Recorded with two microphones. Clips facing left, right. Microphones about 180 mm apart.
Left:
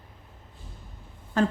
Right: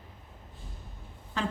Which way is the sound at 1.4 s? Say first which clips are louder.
Left 9 dB; 45° left (ahead or behind).